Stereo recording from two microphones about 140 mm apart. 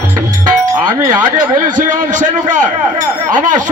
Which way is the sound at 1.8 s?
65° right (ahead or behind).